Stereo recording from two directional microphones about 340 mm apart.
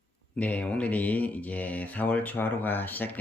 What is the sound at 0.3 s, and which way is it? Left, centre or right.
Speech, centre.